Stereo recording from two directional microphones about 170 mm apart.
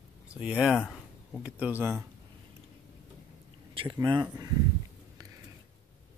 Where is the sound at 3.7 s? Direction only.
30° right (ahead or behind).